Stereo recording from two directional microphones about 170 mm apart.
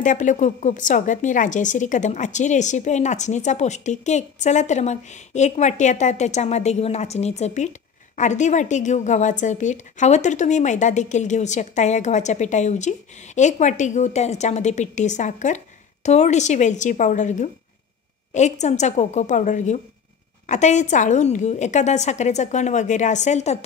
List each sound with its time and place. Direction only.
0.0 s a woman's voice: 50° left (ahead or behind)